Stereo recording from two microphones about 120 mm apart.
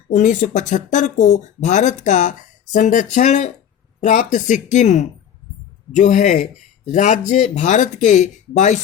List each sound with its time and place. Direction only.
0.1 s speech: 90° left
5.9 s speech: 90° left